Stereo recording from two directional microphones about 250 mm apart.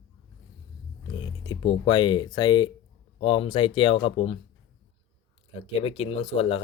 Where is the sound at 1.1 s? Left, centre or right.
Centre.